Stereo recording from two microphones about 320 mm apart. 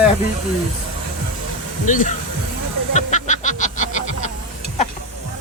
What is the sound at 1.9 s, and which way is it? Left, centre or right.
Speech, left.